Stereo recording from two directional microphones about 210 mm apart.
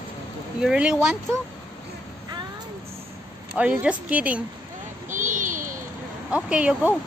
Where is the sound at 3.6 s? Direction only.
5° right (ahead or behind).